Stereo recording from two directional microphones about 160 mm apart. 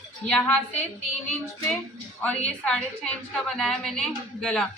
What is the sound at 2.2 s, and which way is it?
A woman's voice, 5° left (ahead or behind).